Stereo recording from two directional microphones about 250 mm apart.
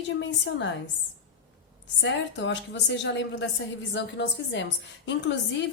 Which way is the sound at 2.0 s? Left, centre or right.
Left.